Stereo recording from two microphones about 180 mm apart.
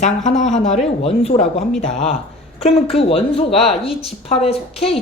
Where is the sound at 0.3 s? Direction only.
40° left (ahead or behind).